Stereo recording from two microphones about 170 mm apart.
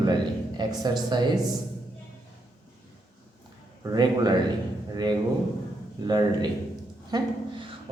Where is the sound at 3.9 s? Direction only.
25° right (ahead or behind).